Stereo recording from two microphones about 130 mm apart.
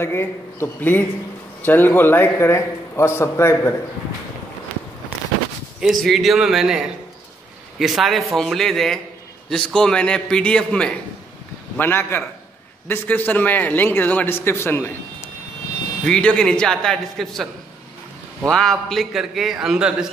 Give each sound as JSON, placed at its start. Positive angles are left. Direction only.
{"t": 0.0, "sound": "a man's voice", "side_deg": 20}
{"t": 5.8, "sound": "a man's voice", "side_deg": 0}
{"t": 7.8, "sound": "a man's voice", "side_deg": 0}
{"t": 18.5, "sound": "a man's voice", "side_deg": 5}